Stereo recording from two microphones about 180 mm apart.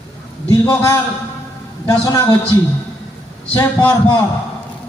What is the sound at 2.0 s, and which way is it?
Speech, 15° left (ahead or behind).